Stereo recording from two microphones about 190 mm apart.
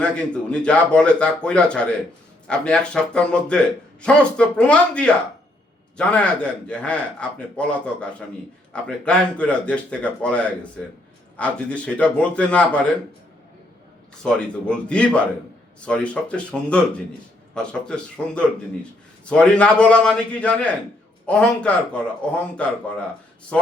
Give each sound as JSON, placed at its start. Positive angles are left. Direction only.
{"t": 0.0, "sound": "a man's voice", "side_deg": 5}
{"t": 14.3, "sound": "a man's voice", "side_deg": 5}